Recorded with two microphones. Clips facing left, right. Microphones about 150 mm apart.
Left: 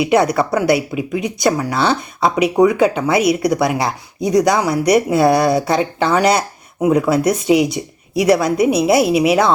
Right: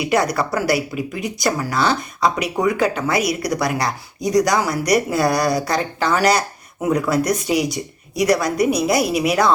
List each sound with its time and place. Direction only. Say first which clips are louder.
0.0 s speech: left 5 dB; 25° left (ahead or behind)